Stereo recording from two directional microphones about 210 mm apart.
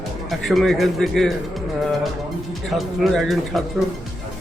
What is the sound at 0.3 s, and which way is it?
Speech, centre (ahead or behind).